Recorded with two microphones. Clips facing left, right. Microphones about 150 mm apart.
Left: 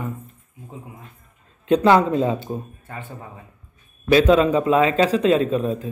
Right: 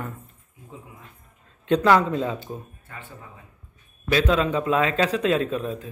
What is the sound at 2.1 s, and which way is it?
Speech, 10° left (ahead or behind).